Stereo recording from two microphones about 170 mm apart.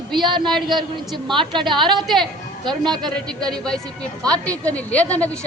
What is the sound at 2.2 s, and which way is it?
Speech, 25° right (ahead or behind).